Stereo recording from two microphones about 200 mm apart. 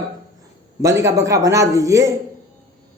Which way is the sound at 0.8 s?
15° right (ahead or behind).